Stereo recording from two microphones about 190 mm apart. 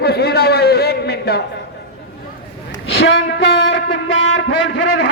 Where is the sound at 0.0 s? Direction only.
55° left (ahead or behind).